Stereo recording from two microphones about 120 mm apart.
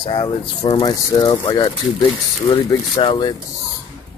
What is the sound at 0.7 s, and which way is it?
Speech, 35° left (ahead or behind).